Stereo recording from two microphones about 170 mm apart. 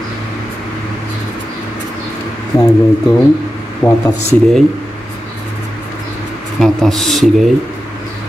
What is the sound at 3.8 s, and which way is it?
Speech, 25° left (ahead or behind).